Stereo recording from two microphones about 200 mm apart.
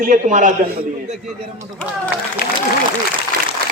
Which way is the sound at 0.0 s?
40° right (ahead or behind).